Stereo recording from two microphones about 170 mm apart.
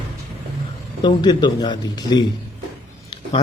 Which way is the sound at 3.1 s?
30° left (ahead or behind).